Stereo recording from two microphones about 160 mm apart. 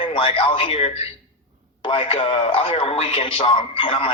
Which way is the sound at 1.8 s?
35° left (ahead or behind).